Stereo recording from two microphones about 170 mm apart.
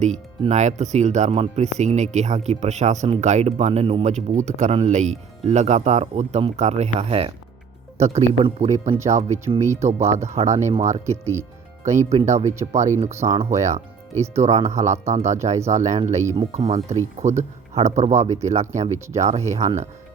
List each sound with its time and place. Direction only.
0.0 s speech: 45° right (ahead or behind)
9.6 s speech: 15° right (ahead or behind)
10.2 s speech: 45° right (ahead or behind)
11.0 s speech: 15° right (ahead or behind)
11.8 s speech: 45° right (ahead or behind)
16.2 s speech: 20° right (ahead or behind)
17.2 s speech: 40° right (ahead or behind)